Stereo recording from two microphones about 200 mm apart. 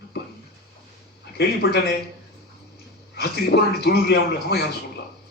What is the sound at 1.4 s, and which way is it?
Speech, 50° left (ahead or behind).